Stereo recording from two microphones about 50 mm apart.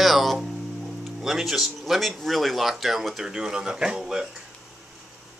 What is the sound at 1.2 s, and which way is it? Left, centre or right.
A man's voice, centre.